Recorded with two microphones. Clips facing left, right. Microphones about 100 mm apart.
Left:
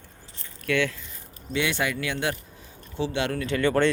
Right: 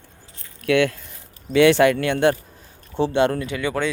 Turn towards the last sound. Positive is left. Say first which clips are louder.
# left 2 dB
turn(degrees=-5)  # may be behind; listen again after turning